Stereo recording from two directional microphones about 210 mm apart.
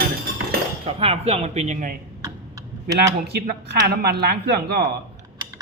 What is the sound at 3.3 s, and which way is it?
Speech, 50° right (ahead or behind).